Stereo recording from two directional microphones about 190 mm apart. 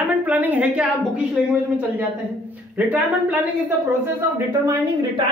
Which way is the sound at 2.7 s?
10° right (ahead or behind).